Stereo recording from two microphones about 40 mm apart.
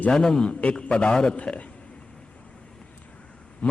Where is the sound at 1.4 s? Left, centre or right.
Left.